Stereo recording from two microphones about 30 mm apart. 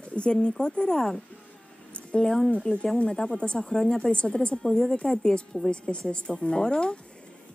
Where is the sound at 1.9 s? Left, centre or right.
Left.